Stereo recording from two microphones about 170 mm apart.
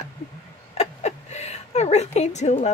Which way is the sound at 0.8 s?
40° left (ahead or behind).